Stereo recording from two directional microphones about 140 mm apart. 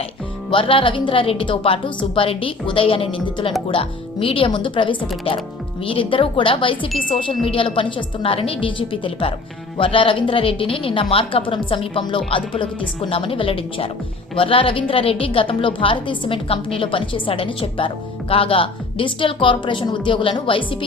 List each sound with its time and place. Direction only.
0.5 s a woman's voice: 40° left (ahead or behind)